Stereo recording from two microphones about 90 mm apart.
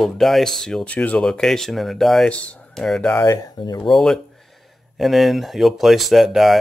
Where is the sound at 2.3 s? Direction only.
15° left (ahead or behind).